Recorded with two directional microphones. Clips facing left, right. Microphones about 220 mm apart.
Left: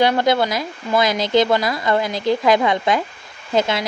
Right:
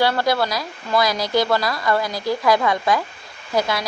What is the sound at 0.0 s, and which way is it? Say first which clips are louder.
Speech: left 3 dB; 20° left (ahead or behind).